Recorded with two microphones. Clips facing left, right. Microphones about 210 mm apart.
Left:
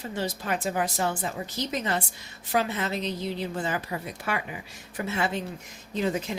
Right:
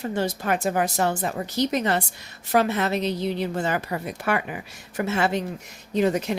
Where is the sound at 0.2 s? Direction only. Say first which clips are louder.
Right 4 dB; 55° right (ahead or behind).